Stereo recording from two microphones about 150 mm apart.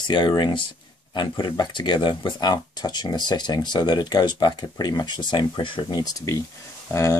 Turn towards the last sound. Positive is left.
turn(degrees=20)  # may be behind; listen again after turning